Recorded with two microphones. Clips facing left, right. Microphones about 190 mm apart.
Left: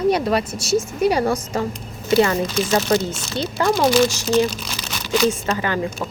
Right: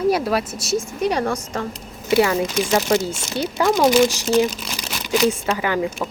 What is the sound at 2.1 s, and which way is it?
Speech, 10° right (ahead or behind).